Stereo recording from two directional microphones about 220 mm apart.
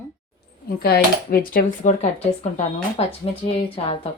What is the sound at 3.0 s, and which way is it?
Speech, 25° left (ahead or behind).